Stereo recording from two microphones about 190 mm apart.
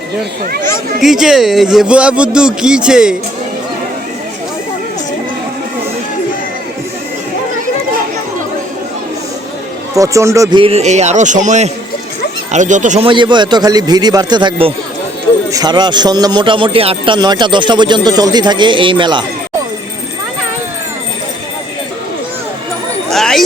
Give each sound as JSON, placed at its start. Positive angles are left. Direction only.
{"t": 1.0, "sound": "speech", "side_deg": 0}
{"t": 10.0, "sound": "speech", "side_deg": -15}
{"t": 10.6, "sound": "a man's voice", "side_deg": -35}
{"t": 13.1, "sound": "speech", "side_deg": -25}
{"t": 23.0, "sound": "a sound", "side_deg": 0}